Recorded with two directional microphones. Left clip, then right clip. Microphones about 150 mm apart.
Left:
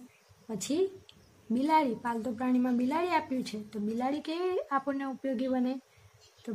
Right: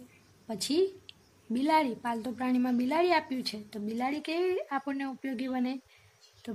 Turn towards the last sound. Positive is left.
turn(degrees=-15)  # may be behind; listen again after turning